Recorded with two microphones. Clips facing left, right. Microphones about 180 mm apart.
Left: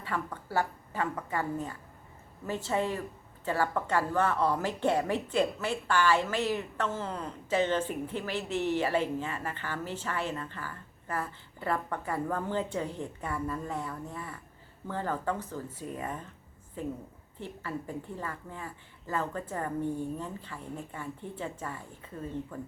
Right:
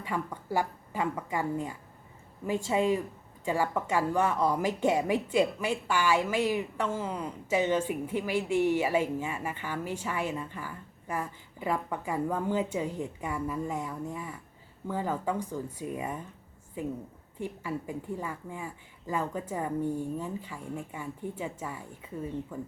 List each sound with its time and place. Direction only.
0.0 s a woman's voice: 15° right (ahead or behind)